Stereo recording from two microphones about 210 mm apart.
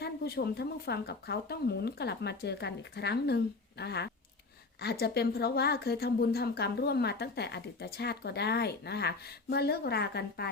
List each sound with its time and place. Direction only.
0.0 s a woman's voice: 50° left (ahead or behind)